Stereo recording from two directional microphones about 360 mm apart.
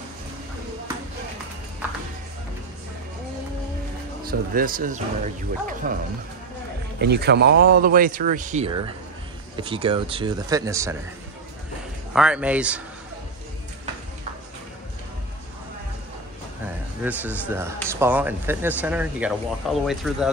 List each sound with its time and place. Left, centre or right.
4.2 s speech: right
7.0 s speech: right; by 11.0 s centre
12.1 s speech: centre
17.0 s speech: centre